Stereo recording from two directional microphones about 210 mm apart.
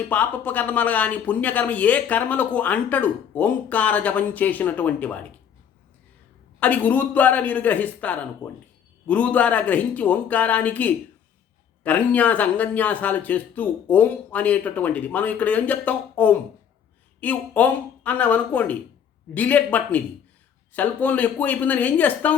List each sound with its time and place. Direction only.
0.1 s speech: 5° left (ahead or behind)
6.6 s speech: 5° left (ahead or behind)